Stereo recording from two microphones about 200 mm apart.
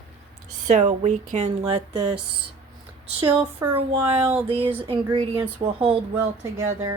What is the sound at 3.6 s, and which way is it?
Speech, 15° right (ahead or behind).